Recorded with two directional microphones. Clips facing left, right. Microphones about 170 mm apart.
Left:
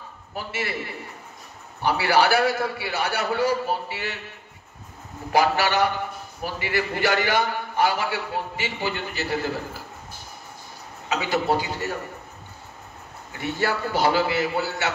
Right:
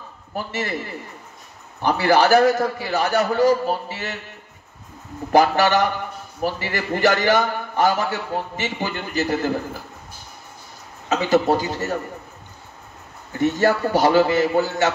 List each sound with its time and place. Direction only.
0.3 s a man's voice: 40° right (ahead or behind)
1.9 s a man's voice: 40° right (ahead or behind)
5.3 s a man's voice: 40° right (ahead or behind)
11.1 s a man's voice: 40° right (ahead or behind)
13.3 s a man's voice: 40° right (ahead or behind)